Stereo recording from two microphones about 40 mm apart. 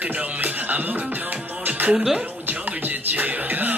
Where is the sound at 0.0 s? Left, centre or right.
Right.